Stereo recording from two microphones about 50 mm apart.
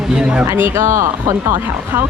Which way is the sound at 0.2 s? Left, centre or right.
Centre.